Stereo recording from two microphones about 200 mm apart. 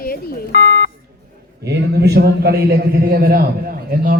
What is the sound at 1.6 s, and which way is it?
A man's voice, 55° right (ahead or behind).